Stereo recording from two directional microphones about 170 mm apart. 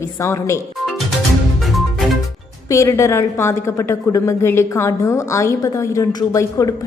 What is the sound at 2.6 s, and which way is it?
A woman's voice, 20° left (ahead or behind).